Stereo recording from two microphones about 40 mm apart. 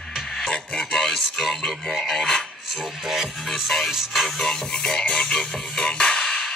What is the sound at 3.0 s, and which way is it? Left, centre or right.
Music, centre.